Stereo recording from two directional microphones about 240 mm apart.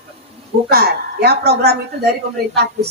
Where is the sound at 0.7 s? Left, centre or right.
Right.